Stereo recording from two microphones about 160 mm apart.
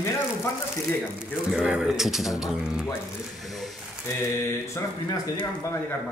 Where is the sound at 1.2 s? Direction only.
5° right (ahead or behind).